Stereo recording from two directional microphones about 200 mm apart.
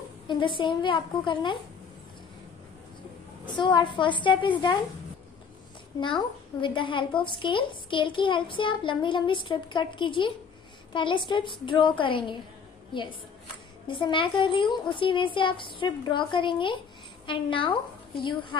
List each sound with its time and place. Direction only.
0.3 s a woman's voice: 25° left (ahead or behind)
3.4 s a woman's voice: 25° left (ahead or behind)
5.9 s a woman's voice: 25° left (ahead or behind)
13.8 s a woman's voice: 25° left (ahead or behind)